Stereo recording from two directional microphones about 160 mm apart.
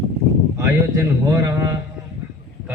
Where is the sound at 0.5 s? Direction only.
20° right (ahead or behind).